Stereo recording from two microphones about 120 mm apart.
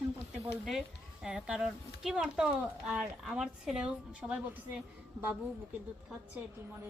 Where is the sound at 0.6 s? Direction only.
5° right (ahead or behind).